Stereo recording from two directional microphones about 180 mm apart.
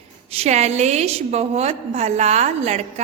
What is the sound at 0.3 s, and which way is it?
A woman's voice, 40° right (ahead or behind).